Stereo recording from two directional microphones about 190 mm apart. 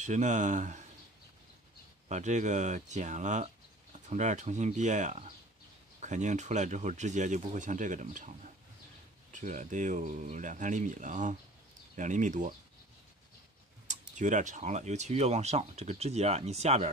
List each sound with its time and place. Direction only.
0.0 s speech: 40° right (ahead or behind)
2.0 s speech: 40° right (ahead or behind)
9.3 s speech: 40° right (ahead or behind)
13.8 s speech: 40° right (ahead or behind)